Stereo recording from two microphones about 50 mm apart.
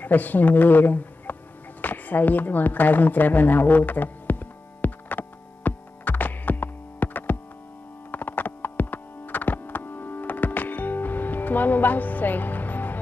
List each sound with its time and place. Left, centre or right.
0.0 s speech: left
1.8 s a sound: left
8.1 s music: left